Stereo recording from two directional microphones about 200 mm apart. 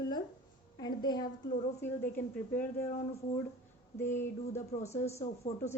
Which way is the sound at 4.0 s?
10° left (ahead or behind).